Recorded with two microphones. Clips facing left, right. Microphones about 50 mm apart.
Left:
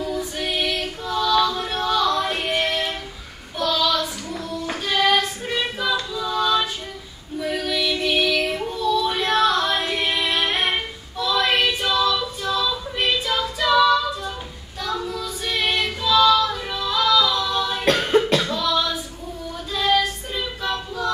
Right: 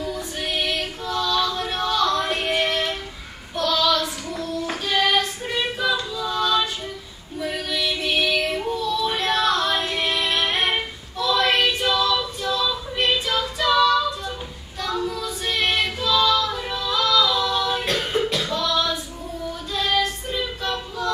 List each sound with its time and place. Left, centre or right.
0.0 s female singing: centre
3.5 s child singing: centre
7.3 s female singing: centre
17.8 s cough: left
18.5 s a sound: centre
19.7 s child singing: centre